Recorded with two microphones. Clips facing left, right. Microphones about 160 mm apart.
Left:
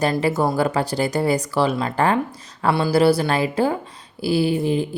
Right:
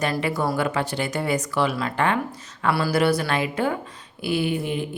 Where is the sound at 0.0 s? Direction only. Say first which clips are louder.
Left 4 dB; 35° left (ahead or behind).